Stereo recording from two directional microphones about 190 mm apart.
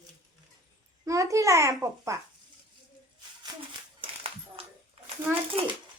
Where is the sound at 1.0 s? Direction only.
15° right (ahead or behind).